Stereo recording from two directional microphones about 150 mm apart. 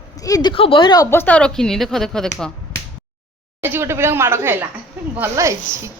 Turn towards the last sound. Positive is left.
turn(degrees=-20)  # may be behind; listen again after turning